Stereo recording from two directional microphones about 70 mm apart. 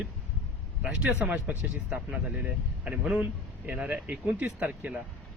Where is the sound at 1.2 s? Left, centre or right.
Right.